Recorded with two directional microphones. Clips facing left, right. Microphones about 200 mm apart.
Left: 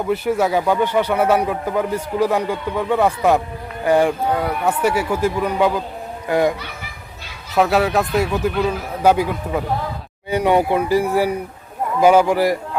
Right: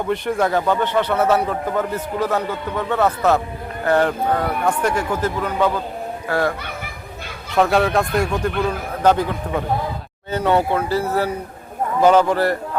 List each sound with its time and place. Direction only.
0.0 s speech: 5° left (ahead or behind)
6.6 s speech: 55° right (ahead or behind)
7.5 s a man's voice: 5° left (ahead or behind)